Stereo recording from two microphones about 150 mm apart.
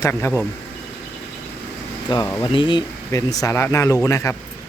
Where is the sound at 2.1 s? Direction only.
30° left (ahead or behind).